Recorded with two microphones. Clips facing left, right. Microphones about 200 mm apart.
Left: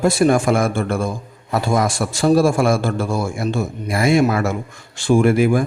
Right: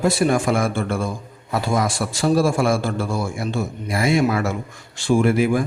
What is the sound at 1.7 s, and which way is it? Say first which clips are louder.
A man's voice: left 2 dB; 50° left (ahead or behind).